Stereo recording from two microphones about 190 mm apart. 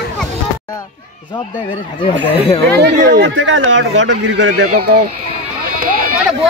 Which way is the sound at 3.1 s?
70° right (ahead or behind).